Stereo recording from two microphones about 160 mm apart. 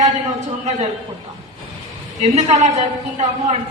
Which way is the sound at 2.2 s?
40° right (ahead or behind).